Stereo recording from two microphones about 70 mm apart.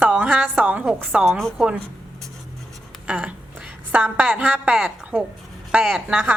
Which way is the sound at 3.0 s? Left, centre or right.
Centre.